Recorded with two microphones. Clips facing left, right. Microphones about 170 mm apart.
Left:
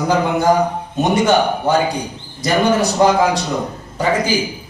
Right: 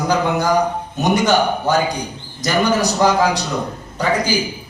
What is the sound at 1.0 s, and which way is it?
A man's voice, 25° left (ahead or behind).